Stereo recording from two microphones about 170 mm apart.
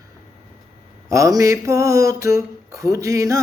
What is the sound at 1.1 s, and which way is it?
Mantra, 20° right (ahead or behind).